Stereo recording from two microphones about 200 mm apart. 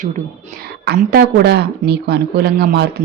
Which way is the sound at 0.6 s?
50° right (ahead or behind).